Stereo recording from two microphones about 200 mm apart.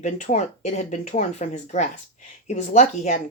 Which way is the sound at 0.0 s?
35° left (ahead or behind).